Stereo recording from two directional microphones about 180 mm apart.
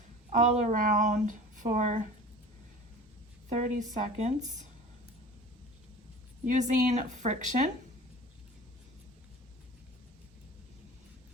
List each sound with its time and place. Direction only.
0.3 s speech: 45° right (ahead or behind)
3.5 s speech: 40° right (ahead or behind)
6.4 s a woman's voice: 45° right (ahead or behind)